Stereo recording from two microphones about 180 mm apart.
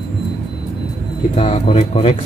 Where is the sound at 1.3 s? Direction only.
40° left (ahead or behind).